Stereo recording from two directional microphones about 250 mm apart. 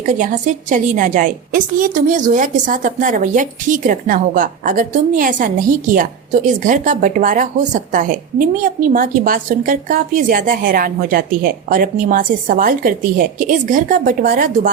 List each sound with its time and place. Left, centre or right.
0.0 s a woman's voice: right